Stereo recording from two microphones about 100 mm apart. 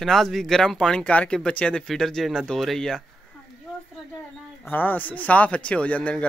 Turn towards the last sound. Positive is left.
turn(degrees=15)  # may be behind; listen again after turning